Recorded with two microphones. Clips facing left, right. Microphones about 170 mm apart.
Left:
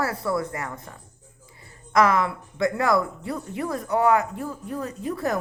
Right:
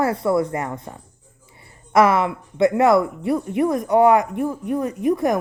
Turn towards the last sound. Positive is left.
turn(degrees=-15)  # may be behind; listen again after turning